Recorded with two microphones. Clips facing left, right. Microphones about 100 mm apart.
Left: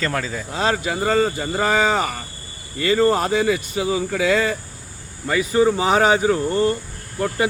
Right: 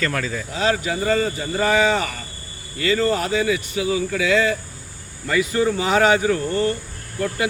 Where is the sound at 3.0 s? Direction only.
30° left (ahead or behind).